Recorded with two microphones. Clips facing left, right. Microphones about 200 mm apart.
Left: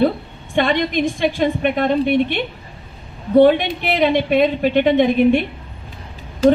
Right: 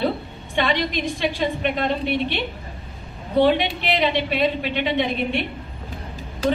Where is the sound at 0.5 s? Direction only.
50° left (ahead or behind).